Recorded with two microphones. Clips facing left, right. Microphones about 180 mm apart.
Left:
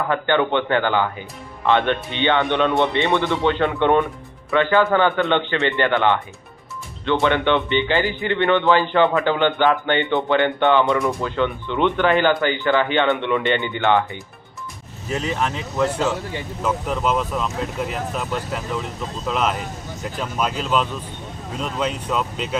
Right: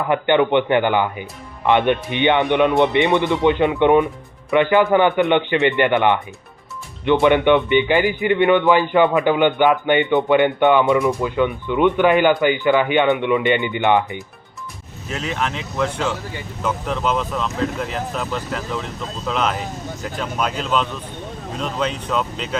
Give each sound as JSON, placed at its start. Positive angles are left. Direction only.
{"t": 0.1, "sound": "speech", "side_deg": -15}
{"t": 15.4, "sound": "speech", "side_deg": 5}